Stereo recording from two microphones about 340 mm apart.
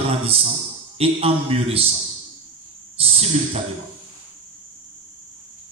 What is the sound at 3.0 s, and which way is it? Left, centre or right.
Speech, centre.